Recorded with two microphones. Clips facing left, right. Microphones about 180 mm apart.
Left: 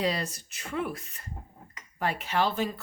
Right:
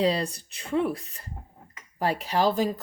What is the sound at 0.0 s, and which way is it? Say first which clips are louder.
Speech: right 5 dB; 30° right (ahead or behind).